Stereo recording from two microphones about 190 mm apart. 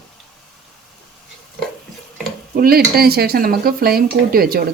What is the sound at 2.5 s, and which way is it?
Speech, 50° right (ahead or behind).